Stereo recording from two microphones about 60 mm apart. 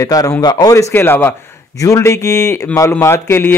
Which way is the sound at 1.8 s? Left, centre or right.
Left.